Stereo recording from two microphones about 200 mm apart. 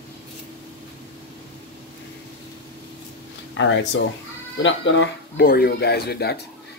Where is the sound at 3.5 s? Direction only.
65° left (ahead or behind).